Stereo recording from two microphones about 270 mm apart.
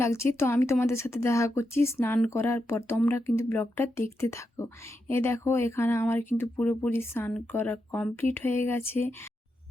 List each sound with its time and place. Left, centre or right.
0.0 s speech: centre